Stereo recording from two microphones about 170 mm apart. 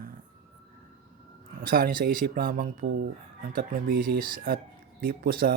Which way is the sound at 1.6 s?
55° right (ahead or behind).